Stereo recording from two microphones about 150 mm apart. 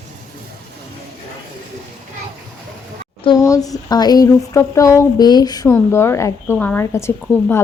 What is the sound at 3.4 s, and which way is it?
Speech, 20° left (ahead or behind).